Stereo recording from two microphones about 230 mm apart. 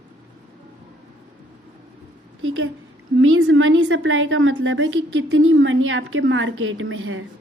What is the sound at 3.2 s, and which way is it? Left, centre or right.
A woman's voice, right.